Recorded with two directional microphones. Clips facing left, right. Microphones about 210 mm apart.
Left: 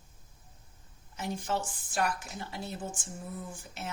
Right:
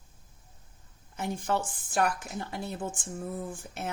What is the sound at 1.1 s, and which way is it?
Speech, 55° right (ahead or behind).